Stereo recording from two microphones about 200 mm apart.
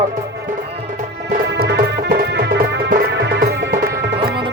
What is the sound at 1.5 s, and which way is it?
Music, 55° right (ahead or behind).